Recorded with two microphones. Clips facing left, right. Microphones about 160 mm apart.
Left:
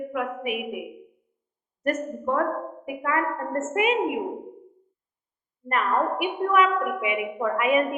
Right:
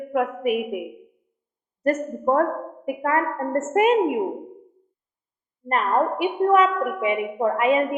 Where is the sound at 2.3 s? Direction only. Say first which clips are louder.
Right 5 dB; 40° right (ahead or behind).